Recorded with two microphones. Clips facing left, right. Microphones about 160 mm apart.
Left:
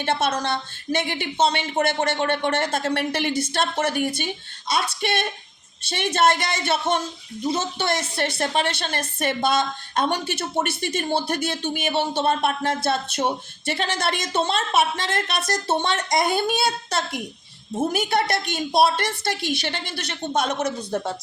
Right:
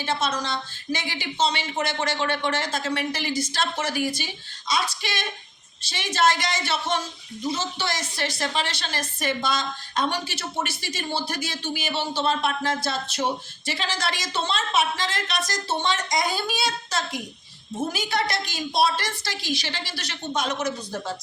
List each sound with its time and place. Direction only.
0.0 s a woman's voice: 60° left (ahead or behind)